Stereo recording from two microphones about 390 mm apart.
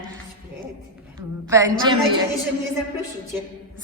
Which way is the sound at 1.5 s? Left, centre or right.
Centre.